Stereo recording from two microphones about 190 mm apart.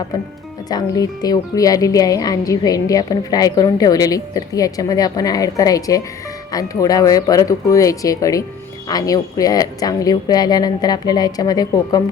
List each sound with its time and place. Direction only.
0.7 s speech: 20° left (ahead or behind)